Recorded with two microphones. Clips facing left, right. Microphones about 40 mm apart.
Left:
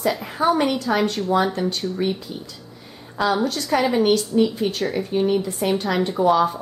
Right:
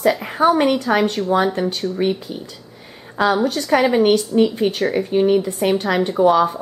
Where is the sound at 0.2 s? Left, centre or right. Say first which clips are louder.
Right 6 dB; right.